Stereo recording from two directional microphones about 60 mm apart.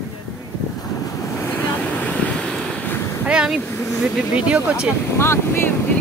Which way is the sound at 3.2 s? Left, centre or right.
Centre.